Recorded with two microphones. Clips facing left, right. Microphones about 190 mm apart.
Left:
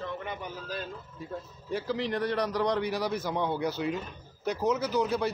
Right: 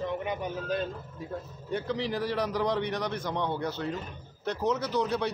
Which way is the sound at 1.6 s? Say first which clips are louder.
Even; centre (ahead or behind).